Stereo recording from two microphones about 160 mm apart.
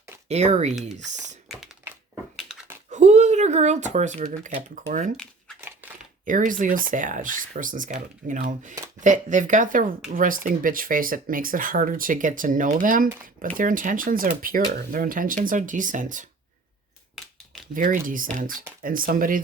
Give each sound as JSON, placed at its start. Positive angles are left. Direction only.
{"t": 0.3, "sound": "speech", "side_deg": -45}
{"t": 2.9, "sound": "speech", "side_deg": -45}
{"t": 5.1, "sound": "a sound", "side_deg": 5}
{"t": 5.8, "sound": "crumpling", "side_deg": -10}
{"t": 6.2, "sound": "speech", "side_deg": -55}
{"t": 17.7, "sound": "speech", "side_deg": -60}